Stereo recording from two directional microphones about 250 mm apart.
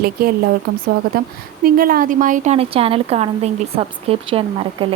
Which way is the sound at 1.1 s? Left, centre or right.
Right.